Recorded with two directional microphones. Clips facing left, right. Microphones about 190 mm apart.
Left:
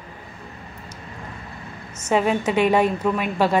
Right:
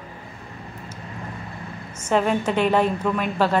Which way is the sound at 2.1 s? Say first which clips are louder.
Left 1 dB; 5° left (ahead or behind).